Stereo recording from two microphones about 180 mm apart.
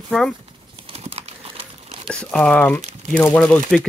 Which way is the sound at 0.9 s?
35° right (ahead or behind).